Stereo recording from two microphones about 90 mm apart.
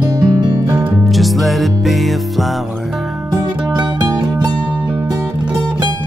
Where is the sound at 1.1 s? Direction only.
Centre (ahead or behind).